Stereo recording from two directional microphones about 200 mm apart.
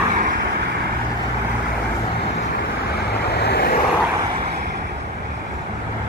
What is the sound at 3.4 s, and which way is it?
Vehicle, 55° left (ahead or behind).